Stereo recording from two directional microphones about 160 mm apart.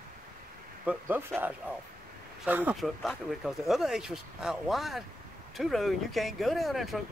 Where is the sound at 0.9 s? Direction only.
15° right (ahead or behind).